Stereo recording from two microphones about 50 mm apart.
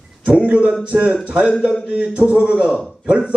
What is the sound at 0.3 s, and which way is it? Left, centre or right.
A man's voice, right.